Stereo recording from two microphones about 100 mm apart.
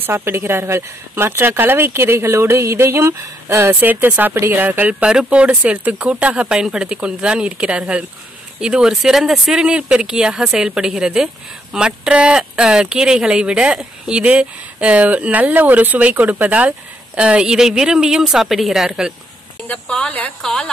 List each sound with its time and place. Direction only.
0.0 s speech: 25° right (ahead or behind); by 19.1 s 5° right (ahead or behind)
19.7 s a woman's voice: 10° left (ahead or behind)